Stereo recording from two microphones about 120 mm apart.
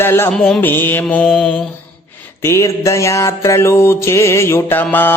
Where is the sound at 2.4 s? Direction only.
25° left (ahead or behind).